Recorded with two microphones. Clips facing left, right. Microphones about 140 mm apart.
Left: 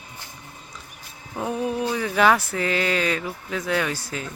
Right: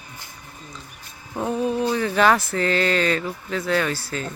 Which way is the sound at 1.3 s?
5° left (ahead or behind).